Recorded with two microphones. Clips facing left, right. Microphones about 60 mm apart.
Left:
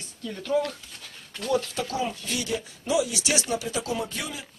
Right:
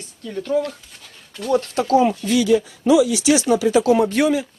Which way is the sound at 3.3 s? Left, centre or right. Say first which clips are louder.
Right 12 dB; right.